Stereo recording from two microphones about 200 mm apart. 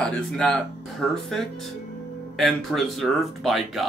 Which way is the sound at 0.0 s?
5° left (ahead or behind).